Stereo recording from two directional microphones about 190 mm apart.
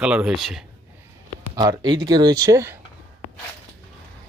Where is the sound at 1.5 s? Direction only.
20° right (ahead or behind).